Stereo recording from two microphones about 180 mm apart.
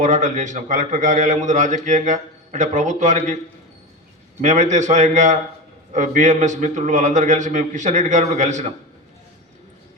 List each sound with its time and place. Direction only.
0.0 s a man's voice: 45° right (ahead or behind)
4.4 s a man's voice: 40° right (ahead or behind)